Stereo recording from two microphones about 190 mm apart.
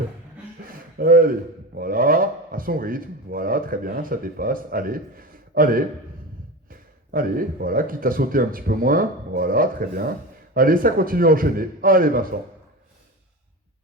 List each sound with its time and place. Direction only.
0.7 s speech: 50° right (ahead or behind)